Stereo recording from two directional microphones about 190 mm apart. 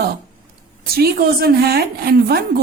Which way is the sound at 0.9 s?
55° right (ahead or behind).